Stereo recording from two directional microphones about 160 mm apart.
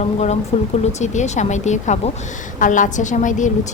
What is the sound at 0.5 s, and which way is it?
A woman's voice, 40° left (ahead or behind).